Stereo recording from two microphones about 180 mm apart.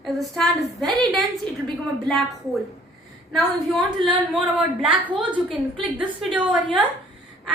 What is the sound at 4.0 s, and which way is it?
Speech, 30° right (ahead or behind).